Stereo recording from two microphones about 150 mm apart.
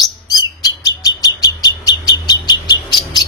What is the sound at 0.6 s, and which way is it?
Bird, 25° left (ahead or behind).